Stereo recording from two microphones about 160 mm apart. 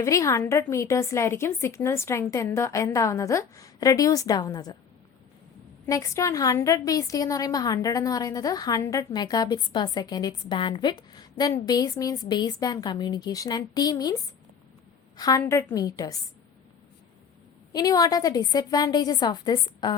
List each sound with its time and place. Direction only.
0.0 s a woman's voice: 20° left (ahead or behind)
5.8 s a woman's voice: 20° left (ahead or behind)
15.2 s a woman's voice: 20° left (ahead or behind)
17.7 s a woman's voice: 25° left (ahead or behind)